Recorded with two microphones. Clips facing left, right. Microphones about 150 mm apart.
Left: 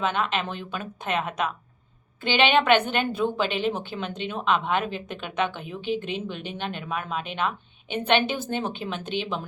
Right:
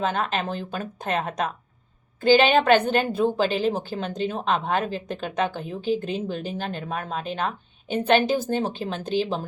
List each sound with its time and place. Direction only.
0.0 s a woman's voice: 40° right (ahead or behind)